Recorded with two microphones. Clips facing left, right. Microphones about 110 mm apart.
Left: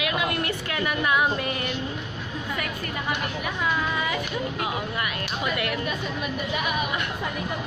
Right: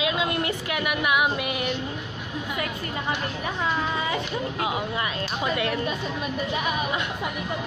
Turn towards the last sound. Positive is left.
turn(degrees=-25)  # may be behind; listen again after turning